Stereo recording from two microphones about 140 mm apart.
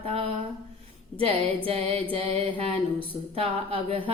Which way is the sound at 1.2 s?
40° right (ahead or behind).